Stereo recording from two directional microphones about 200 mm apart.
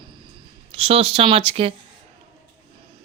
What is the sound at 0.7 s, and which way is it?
Speech, 30° right (ahead or behind).